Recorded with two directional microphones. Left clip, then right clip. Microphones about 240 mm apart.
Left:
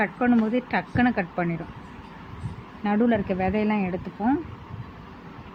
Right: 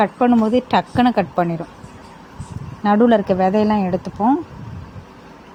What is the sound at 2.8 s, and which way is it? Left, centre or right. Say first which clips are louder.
A woman's voice: right 9 dB; right.